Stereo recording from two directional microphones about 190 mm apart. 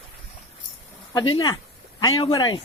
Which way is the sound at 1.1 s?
20° left (ahead or behind).